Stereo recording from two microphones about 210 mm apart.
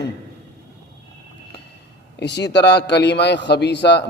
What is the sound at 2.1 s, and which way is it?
A man's voice, 55° left (ahead or behind).